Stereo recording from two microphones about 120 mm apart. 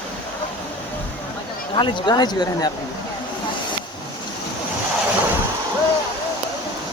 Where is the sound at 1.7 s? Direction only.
40° left (ahead or behind).